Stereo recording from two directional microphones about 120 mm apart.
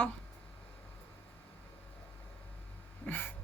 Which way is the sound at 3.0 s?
15° left (ahead or behind).